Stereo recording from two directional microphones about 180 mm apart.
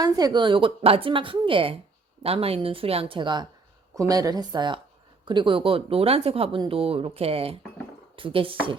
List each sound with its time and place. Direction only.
0.0 s a woman's voice: 20° right (ahead or behind)